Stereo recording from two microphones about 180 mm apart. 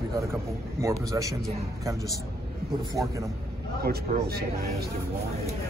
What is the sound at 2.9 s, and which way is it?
Speech, 20° right (ahead or behind).